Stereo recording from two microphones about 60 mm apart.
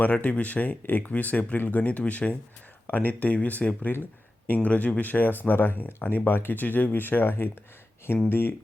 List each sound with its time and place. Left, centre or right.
0.0 s speech: left